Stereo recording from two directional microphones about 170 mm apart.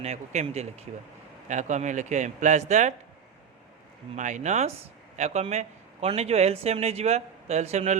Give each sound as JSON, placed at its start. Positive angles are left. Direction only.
{"t": 0.0, "sound": "a man's voice", "side_deg": -40}
{"t": 4.1, "sound": "speech", "side_deg": -45}